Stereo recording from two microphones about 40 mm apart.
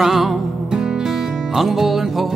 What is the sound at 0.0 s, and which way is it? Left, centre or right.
Music, centre.